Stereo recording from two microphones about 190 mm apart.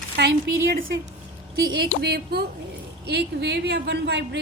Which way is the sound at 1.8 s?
55° right (ahead or behind).